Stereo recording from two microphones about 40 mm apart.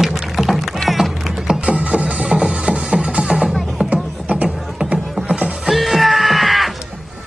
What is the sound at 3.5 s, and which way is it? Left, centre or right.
Music, centre.